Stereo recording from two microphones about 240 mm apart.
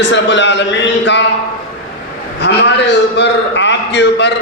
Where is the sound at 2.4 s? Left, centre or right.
Left.